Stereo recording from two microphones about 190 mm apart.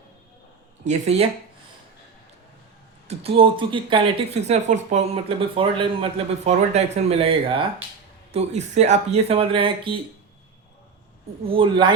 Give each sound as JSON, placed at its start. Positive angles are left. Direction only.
{"t": 0.9, "sound": "speech", "side_deg": -35}
{"t": 3.1, "sound": "speech", "side_deg": -30}
{"t": 11.4, "sound": "speech", "side_deg": -25}